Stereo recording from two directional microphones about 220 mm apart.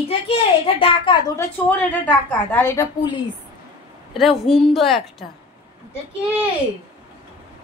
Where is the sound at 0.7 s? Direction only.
25° left (ahead or behind).